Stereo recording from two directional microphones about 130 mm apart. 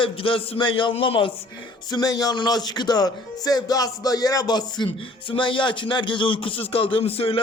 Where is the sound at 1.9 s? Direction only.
30° left (ahead or behind).